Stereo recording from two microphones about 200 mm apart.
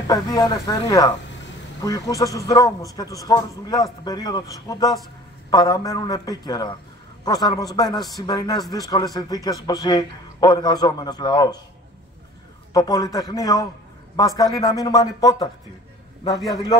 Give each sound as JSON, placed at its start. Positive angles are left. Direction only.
{"t": 0.1, "sound": "a man's voice", "side_deg": 20}
{"t": 12.7, "sound": "a man's voice", "side_deg": 15}